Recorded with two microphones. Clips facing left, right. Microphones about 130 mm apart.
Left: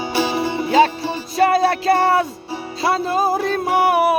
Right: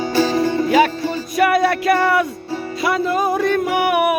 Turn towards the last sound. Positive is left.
turn(degrees=30)  # may be behind; listen again after turning